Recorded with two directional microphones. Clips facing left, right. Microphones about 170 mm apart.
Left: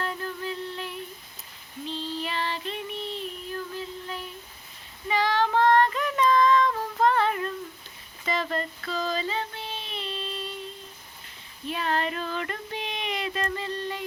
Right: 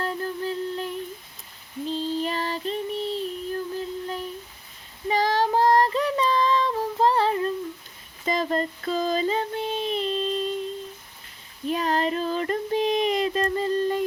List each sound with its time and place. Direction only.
0.0 s a sound: 35° right (ahead or behind)
1.9 s child singing: 40° right (ahead or behind)
5.0 s female singing: 40° right (ahead or behind)
7.0 s a sound: 30° right (ahead or behind)
8.2 s child singing: 35° right (ahead or behind)
11.6 s child singing: 40° right (ahead or behind)